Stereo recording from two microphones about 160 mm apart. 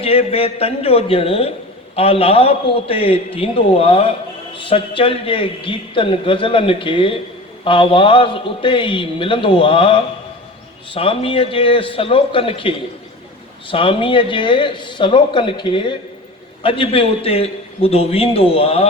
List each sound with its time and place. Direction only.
0.0 s a man's voice: 35° left (ahead or behind)